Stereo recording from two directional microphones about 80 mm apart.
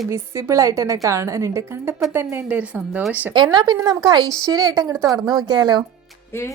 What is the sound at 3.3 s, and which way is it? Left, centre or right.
A woman's voice, right.